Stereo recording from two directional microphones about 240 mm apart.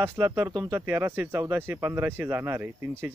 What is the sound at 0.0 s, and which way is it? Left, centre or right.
Speech, centre.